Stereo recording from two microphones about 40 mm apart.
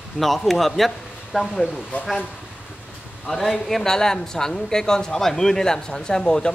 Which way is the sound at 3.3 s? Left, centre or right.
Centre.